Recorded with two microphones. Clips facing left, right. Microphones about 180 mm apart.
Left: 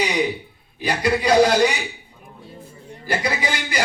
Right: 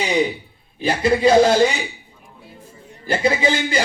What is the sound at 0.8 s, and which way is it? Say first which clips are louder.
Speech: right 4 dB; 25° right (ahead or behind).